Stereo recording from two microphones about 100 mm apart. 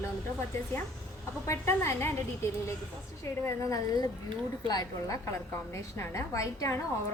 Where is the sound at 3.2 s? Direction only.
30° left (ahead or behind).